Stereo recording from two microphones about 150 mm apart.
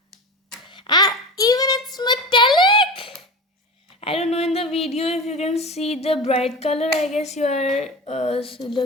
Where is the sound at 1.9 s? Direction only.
30° left (ahead or behind).